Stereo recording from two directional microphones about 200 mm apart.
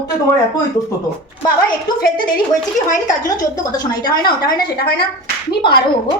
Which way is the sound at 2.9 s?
20° left (ahead or behind).